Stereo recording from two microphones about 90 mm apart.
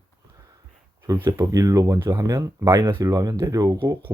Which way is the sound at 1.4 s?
40° right (ahead or behind).